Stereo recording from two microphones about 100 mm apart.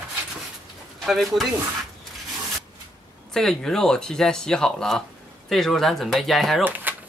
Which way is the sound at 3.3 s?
5° left (ahead or behind).